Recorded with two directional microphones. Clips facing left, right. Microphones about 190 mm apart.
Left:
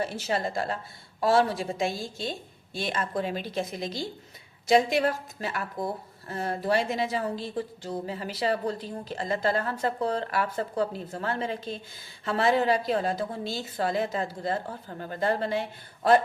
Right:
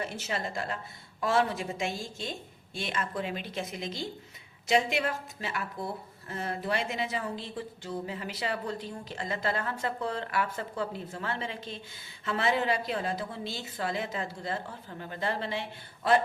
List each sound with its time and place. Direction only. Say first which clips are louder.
0.0 s speech: left 5 dB; 35° left (ahead or behind)